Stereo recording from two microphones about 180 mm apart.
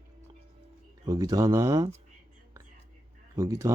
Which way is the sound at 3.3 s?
15° right (ahead or behind).